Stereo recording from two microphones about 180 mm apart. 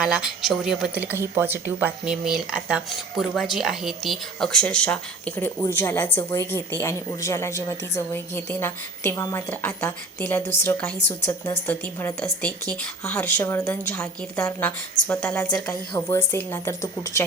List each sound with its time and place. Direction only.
0.0 s a woman's voice: 5° right (ahead or behind); by 17.2 s 15° left (ahead or behind)